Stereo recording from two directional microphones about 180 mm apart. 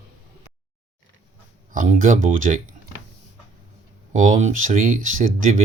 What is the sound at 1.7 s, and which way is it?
Speech, 45° right (ahead or behind).